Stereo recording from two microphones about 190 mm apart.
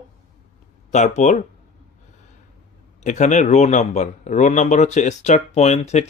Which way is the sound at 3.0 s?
40° left (ahead or behind).